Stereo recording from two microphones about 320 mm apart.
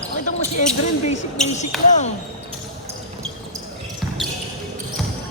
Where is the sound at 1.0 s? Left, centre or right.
Left.